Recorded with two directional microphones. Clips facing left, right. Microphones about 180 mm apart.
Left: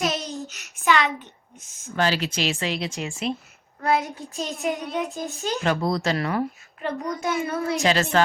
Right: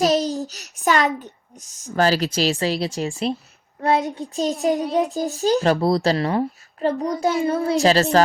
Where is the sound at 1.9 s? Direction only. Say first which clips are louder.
Right 5 dB; 40° right (ahead or behind).